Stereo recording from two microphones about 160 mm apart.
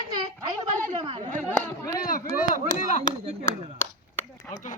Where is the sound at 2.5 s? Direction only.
55° left (ahead or behind).